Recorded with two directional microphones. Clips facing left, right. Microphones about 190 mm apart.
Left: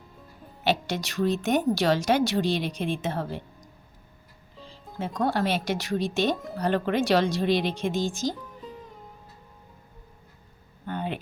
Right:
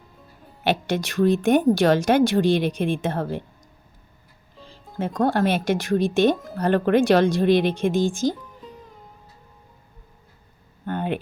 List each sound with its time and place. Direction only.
0.6 s a woman's voice: 55° right (ahead or behind)
4.9 s a woman's voice: 50° right (ahead or behind)
8.4 s music: centre (ahead or behind)
10.8 s a sound: 55° right (ahead or behind)